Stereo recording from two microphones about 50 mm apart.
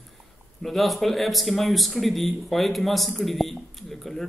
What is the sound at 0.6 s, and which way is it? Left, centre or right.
Speech, centre.